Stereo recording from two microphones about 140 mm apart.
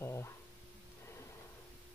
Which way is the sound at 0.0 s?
20° left (ahead or behind).